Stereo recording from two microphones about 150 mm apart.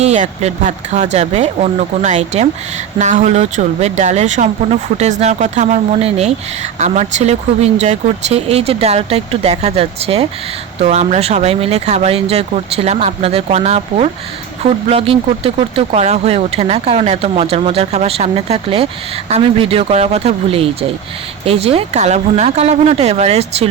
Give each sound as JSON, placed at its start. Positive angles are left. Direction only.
{"t": 0.0, "sound": "speech", "side_deg": -50}